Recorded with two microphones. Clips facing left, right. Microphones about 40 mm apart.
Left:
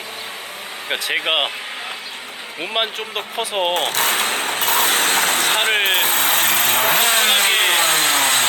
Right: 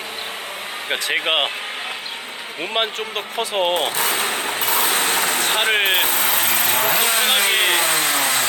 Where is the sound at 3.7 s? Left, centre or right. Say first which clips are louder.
Left 1 dB; left.